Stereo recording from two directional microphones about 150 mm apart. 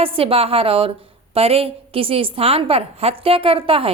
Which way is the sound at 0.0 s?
40° right (ahead or behind).